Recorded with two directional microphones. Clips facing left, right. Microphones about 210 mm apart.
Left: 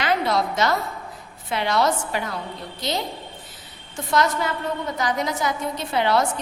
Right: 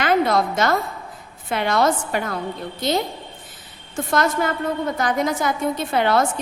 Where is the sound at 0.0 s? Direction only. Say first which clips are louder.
Right 4 dB; 50° right (ahead or behind).